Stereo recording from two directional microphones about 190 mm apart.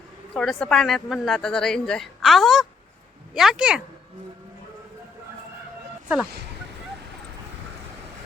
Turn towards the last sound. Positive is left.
turn(degrees=-60)  # may be behind; listen again after turning